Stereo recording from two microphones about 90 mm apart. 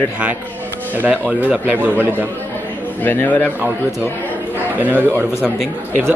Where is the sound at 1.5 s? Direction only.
20° right (ahead or behind).